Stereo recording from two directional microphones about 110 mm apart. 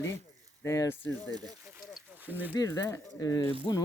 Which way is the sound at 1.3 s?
35° right (ahead or behind).